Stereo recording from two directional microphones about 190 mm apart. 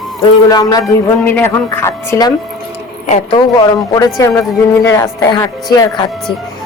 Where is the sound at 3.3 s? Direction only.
20° left (ahead or behind).